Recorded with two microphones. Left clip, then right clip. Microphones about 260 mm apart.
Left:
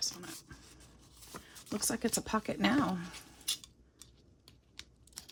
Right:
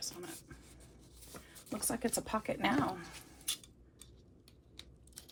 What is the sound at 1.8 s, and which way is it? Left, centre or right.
Speech, left.